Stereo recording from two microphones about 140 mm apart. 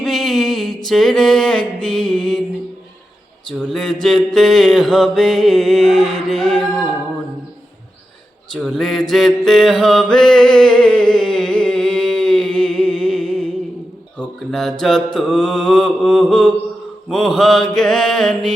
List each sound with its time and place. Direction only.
0.0 s music: centre (ahead or behind)
3.6 s mantra: 5° left (ahead or behind)
8.5 s mantra: 5° left (ahead or behind)